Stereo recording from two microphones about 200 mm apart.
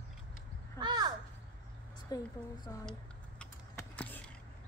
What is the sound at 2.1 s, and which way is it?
Speech, 20° left (ahead or behind).